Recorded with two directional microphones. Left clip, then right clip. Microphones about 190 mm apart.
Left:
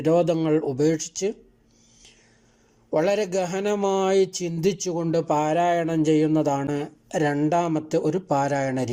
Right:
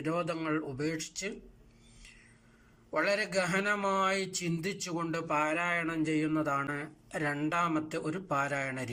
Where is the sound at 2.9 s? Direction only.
35° left (ahead or behind).